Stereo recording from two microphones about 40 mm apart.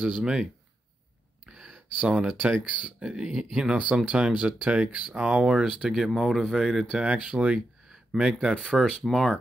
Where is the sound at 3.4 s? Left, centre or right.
Centre.